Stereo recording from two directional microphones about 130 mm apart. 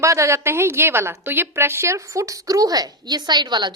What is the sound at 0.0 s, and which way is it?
A woman's voice, 20° right (ahead or behind).